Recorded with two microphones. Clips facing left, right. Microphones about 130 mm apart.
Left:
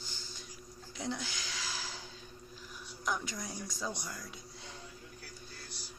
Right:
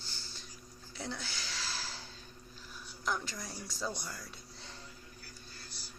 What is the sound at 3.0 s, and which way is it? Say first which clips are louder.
Speech: even; 15° left (ahead or behind).